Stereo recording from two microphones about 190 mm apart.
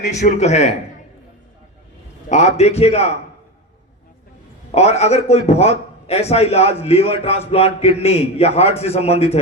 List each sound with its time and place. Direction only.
0.1 s a man's voice: 35° left (ahead or behind)
2.3 s a man's voice: 35° left (ahead or behind)
4.7 s a man's voice: 35° left (ahead or behind)